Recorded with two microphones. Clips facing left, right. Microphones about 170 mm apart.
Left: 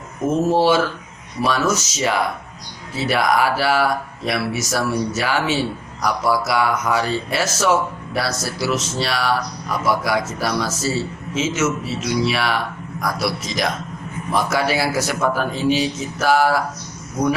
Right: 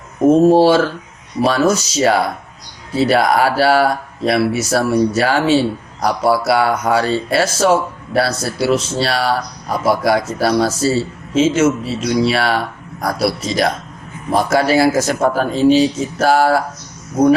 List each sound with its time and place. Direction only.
0.3 s speech: 35° right (ahead or behind)